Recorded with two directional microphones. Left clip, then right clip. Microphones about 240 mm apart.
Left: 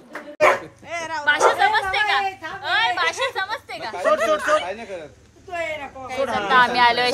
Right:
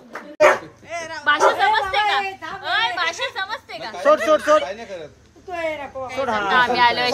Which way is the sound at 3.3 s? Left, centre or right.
Centre.